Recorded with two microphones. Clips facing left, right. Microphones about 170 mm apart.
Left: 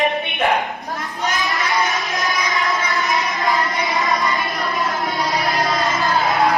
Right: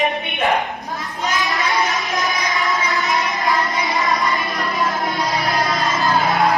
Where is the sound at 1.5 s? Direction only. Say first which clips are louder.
Even; centre (ahead or behind).